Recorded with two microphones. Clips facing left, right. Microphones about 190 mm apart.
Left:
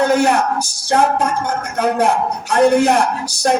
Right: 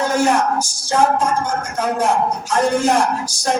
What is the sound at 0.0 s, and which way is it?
Speech, 60° left (ahead or behind).